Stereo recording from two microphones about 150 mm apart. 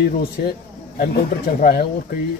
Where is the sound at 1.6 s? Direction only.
85° left.